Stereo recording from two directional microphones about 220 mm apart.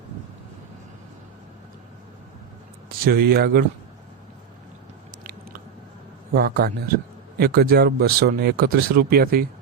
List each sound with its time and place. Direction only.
2.9 s speech: 45° right (ahead or behind)
6.3 s speech: 45° right (ahead or behind)